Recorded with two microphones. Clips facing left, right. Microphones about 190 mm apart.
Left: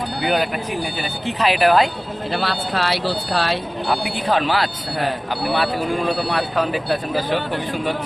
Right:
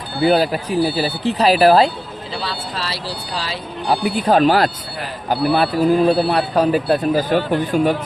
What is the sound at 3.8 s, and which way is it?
Speech, 40° right (ahead or behind).